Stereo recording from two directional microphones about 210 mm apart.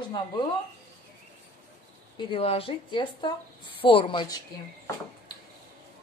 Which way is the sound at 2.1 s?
25° left (ahead or behind).